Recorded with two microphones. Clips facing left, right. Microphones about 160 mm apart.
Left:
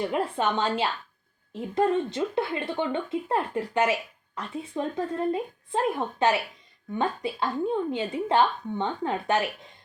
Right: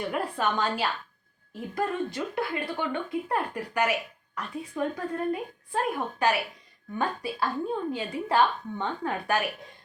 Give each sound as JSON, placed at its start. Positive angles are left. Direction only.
{"t": 0.1, "sound": "speech", "side_deg": 25}